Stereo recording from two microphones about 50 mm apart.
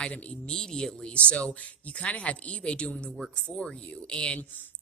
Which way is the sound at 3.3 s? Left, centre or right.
Centre.